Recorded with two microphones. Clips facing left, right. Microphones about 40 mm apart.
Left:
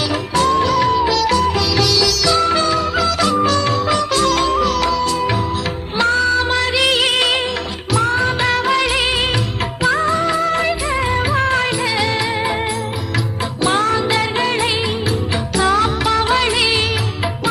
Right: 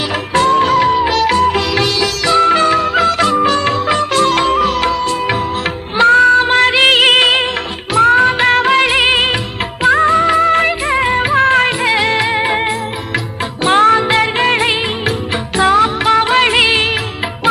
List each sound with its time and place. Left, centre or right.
0.3 s music of bollywood: right
3.4 s music: right
7.9 s music of bollywood: right
13.6 s music: right
16.0 s music of bollywood: right